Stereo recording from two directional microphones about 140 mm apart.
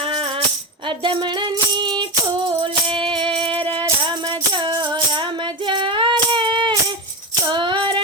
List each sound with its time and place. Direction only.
0.0 s music: 40° right (ahead or behind)